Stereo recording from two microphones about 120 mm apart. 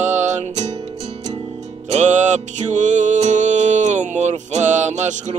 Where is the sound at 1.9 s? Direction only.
75° right (ahead or behind).